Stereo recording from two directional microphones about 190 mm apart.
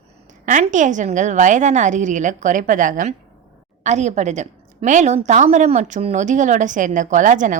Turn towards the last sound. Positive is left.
turn(degrees=-40)  # may be behind; listen again after turning